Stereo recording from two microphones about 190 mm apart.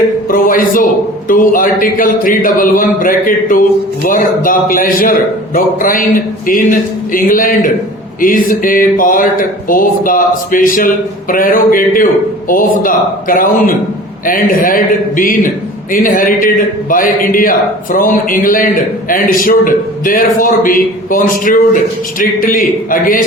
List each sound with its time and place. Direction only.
0.3 s a man's voice: 45° left (ahead or behind)